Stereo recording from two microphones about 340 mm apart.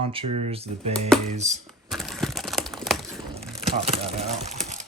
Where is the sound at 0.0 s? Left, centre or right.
Centre.